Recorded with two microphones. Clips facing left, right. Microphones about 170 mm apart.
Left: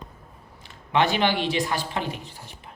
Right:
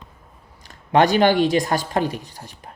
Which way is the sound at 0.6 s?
40° right (ahead or behind).